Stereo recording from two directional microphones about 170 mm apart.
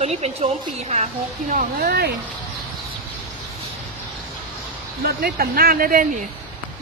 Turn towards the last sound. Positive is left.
turn(degrees=-55)  # may be behind; listen again after turning